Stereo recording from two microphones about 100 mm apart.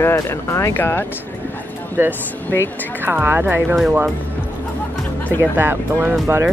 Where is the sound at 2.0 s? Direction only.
20° right (ahead or behind).